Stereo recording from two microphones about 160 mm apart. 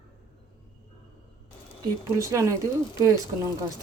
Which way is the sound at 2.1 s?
20° right (ahead or behind).